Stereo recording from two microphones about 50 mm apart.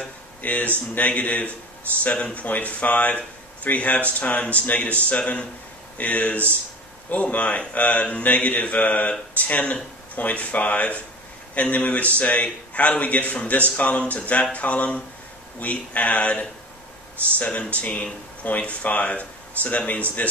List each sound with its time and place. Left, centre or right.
0.4 s a man's voice: left